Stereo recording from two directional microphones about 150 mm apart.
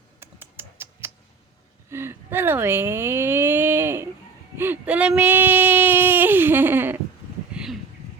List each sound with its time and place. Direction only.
0.2 s typing: 15° right (ahead or behind)
1.9 s speech: 15° right (ahead or behind)
4.5 s a sound: 15° right (ahead or behind)